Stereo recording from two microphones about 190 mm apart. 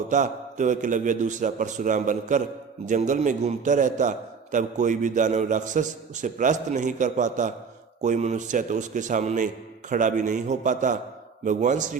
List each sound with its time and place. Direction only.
0.1 s a man's voice: 40° right (ahead or behind)